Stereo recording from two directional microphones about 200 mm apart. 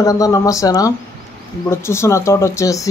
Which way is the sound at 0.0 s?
15° left (ahead or behind).